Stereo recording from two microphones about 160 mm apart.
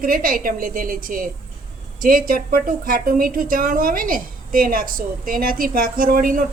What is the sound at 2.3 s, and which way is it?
A woman's voice, 60° right (ahead or behind).